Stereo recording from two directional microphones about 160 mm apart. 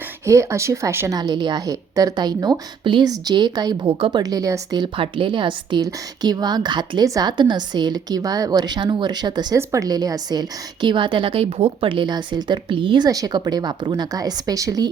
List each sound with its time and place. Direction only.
0.3 s a woman's voice: 20° right (ahead or behind)